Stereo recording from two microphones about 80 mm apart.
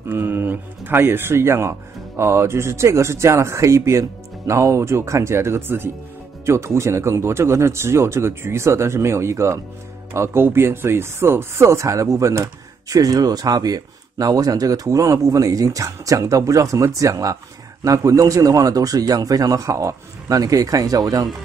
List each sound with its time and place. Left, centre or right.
0.1 s speech: right